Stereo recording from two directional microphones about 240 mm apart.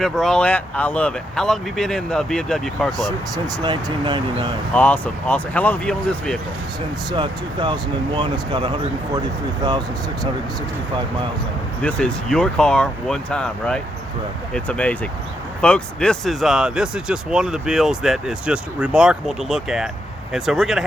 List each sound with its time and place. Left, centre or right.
0.0 s speech: centre
3.3 s speech: centre
4.7 s speech: centre
7.1 s speech: centre
11.8 s speech: centre